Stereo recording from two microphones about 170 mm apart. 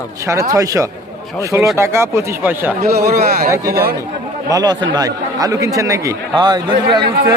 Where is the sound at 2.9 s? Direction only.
65° right (ahead or behind).